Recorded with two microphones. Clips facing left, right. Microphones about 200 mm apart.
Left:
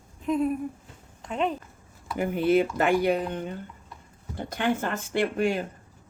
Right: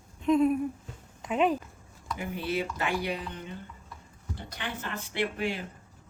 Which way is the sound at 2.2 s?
50° left (ahead or behind).